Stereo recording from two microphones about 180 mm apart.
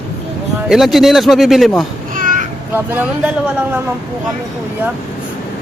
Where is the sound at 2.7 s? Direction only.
10° right (ahead or behind).